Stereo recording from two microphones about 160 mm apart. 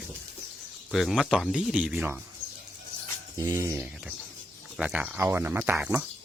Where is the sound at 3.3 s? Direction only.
20° right (ahead or behind).